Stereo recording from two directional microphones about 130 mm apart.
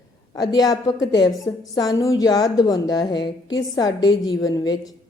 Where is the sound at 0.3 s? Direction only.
30° left (ahead or behind).